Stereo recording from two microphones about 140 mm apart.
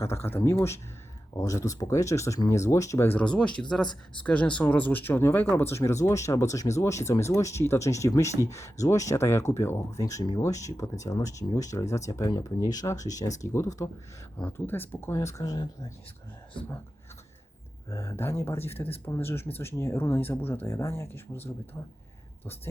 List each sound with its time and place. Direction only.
0.0 s speech: 20° left (ahead or behind)
17.8 s speech: 20° left (ahead or behind)